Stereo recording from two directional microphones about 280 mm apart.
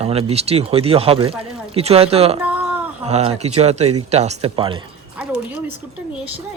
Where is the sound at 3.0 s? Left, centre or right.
Right.